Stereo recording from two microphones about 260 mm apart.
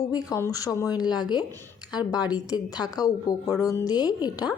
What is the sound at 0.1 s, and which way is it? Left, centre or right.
Speech, centre.